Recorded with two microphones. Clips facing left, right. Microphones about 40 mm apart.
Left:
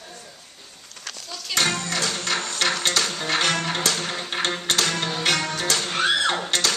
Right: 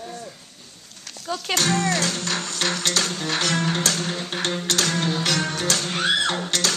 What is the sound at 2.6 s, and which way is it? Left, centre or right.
Music, left.